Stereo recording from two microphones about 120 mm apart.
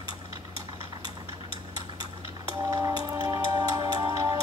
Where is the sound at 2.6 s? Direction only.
35° right (ahead or behind).